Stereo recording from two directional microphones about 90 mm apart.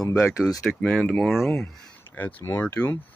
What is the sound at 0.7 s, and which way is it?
Speech, 5° left (ahead or behind).